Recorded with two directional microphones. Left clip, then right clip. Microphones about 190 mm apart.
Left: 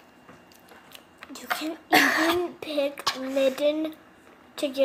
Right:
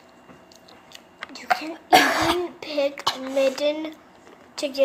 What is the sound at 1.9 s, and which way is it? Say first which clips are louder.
Speech: right 3 dB; 15° right (ahead or behind).